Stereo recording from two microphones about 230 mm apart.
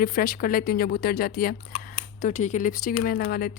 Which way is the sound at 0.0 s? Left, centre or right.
Left.